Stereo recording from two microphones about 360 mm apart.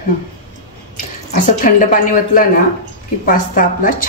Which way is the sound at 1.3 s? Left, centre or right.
Left.